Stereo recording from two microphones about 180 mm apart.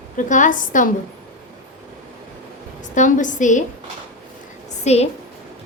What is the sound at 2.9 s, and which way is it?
Speech, 45° left (ahead or behind).